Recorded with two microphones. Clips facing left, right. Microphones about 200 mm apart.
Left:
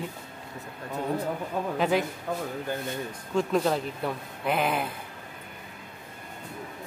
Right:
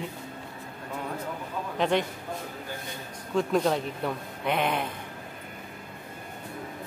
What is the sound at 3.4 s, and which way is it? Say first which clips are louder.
Speech: even; centre (ahead or behind).